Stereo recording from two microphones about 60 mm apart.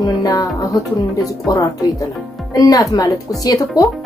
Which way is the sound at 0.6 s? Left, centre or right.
Left.